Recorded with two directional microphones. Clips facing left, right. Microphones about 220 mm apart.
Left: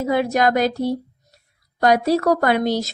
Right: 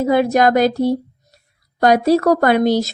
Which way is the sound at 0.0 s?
40° right (ahead or behind).